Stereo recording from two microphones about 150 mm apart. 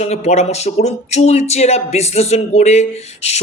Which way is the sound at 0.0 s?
50° left (ahead or behind).